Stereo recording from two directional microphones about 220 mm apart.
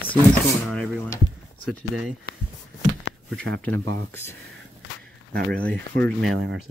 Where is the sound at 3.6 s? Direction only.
10° left (ahead or behind).